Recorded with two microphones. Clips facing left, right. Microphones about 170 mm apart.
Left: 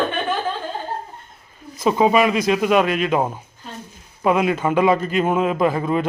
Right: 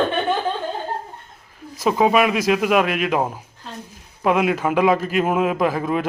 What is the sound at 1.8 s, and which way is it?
A man's voice, centre (ahead or behind).